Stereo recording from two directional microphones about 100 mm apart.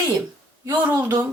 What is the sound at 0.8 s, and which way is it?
Speech, 30° right (ahead or behind).